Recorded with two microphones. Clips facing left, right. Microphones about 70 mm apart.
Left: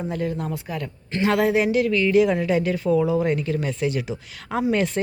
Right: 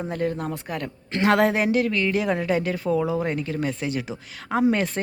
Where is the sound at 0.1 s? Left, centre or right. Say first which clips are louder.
Even; right.